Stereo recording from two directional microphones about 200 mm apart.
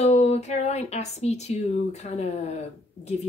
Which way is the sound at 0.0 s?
30° left (ahead or behind).